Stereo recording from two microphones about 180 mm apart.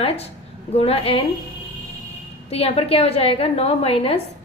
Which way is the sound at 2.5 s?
35° left (ahead or behind).